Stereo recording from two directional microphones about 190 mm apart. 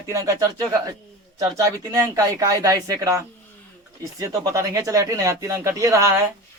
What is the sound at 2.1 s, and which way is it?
Speech, 20° right (ahead or behind).